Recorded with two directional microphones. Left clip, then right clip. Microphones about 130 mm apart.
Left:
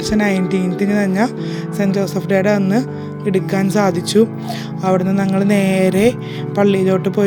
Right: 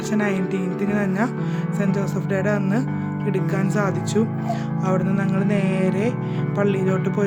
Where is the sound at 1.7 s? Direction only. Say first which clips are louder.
Left 7 dB; 45° left (ahead or behind).